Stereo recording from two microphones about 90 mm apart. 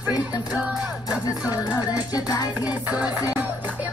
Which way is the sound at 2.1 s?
45° left (ahead or behind).